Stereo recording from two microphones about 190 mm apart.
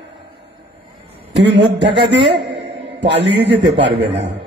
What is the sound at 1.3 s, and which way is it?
A man's voice, 65° right (ahead or behind).